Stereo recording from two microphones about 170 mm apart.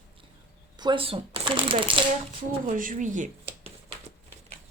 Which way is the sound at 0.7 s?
25° right (ahead or behind).